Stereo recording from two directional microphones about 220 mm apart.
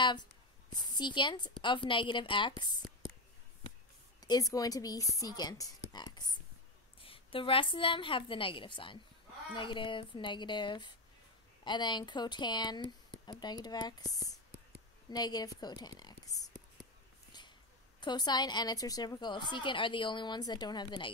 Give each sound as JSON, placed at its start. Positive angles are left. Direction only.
{"t": 0.0, "sound": "a sound", "side_deg": 20}
{"t": 1.6, "sound": "a woman's voice", "side_deg": 20}
{"t": 4.2, "sound": "a woman's voice", "side_deg": 15}
{"t": 5.9, "sound": "whispering", "side_deg": 20}
{"t": 7.0, "sound": "a woman's voice", "side_deg": 25}
{"t": 18.0, "sound": "a woman's voice", "side_deg": 20}